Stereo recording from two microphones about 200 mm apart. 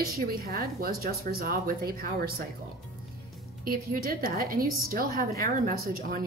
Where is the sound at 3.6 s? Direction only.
45° right (ahead or behind).